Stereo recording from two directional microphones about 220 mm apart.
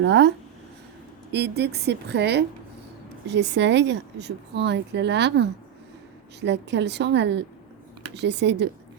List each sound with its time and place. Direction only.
0.0 s speech: 50° right (ahead or behind)